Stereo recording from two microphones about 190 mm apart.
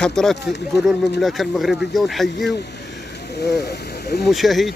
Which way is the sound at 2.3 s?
60° left (ahead or behind).